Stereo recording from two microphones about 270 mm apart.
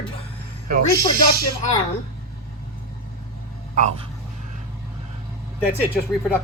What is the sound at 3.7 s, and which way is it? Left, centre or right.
Speech, right.